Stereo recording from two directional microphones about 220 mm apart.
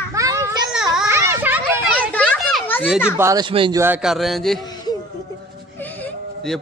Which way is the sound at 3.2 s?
15° right (ahead or behind).